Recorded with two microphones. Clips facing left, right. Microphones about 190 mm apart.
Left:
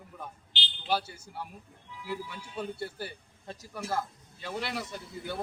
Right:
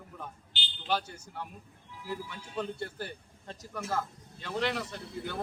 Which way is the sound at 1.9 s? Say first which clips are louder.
Left 1 dB; 40° right (ahead or behind).